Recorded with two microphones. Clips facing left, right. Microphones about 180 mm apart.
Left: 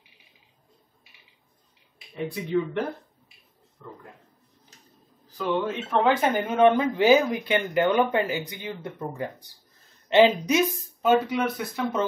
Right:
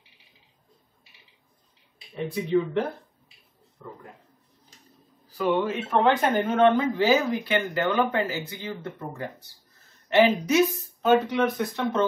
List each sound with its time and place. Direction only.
2.1 s speech: centre (ahead or behind)
5.6 s speech: centre (ahead or behind)